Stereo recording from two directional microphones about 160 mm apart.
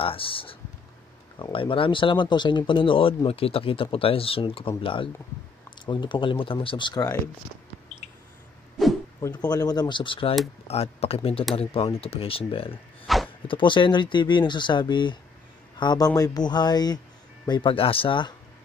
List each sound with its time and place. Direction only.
0.0 s speech: 35° left (ahead or behind)
9.2 s speech: 25° left (ahead or behind)
13.0 s a sound: centre (ahead or behind)
13.5 s speech: 30° left (ahead or behind)